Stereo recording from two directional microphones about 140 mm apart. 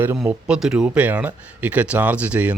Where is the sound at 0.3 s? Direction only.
5° right (ahead or behind).